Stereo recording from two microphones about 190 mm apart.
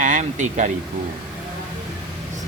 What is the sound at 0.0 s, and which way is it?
Speech, 40° right (ahead or behind).